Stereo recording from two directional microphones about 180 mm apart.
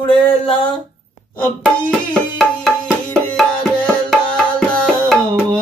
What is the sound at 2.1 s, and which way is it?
Music, 5° left (ahead or behind).